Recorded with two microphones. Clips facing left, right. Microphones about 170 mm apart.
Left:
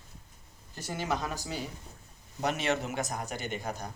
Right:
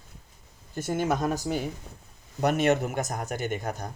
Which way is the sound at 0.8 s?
50° right (ahead or behind).